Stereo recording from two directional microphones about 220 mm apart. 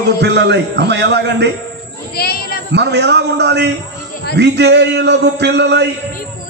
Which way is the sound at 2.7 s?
50° right (ahead or behind).